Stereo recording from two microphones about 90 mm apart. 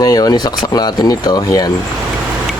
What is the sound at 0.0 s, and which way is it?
Speech, 45° left (ahead or behind).